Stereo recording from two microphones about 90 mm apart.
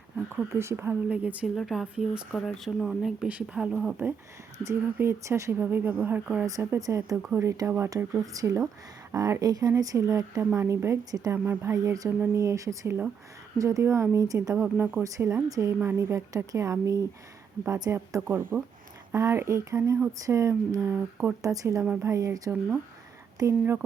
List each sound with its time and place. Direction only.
0.3 s speech: 25° right (ahead or behind)
1.0 s speech: 15° right (ahead or behind)
1.5 s speech: centre (ahead or behind)
3.2 s speech: 15° right (ahead or behind)
4.6 s speech: 30° right (ahead or behind)
6.4 s speech: 35° right (ahead or behind)
12.0 s speech: 30° right (ahead or behind)
14.5 s speech: 25° right (ahead or behind)
15.0 s speech: 35° right (ahead or behind)
15.8 s speech: 30° right (ahead or behind)
20.9 s speech: 20° right (ahead or behind)
21.4 s speech: 40° right (ahead or behind)